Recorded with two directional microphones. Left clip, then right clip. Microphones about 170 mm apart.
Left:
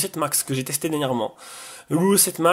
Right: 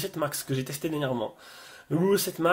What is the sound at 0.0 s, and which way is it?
Speech, 35° left (ahead or behind).